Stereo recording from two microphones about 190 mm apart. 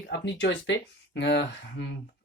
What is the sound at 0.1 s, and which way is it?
Speech, 70° left (ahead or behind).